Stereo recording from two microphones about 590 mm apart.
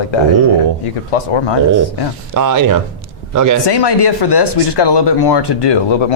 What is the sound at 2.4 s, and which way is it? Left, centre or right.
A man's voice, right.